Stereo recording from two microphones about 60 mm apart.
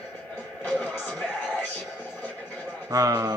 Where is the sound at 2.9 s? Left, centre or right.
Right.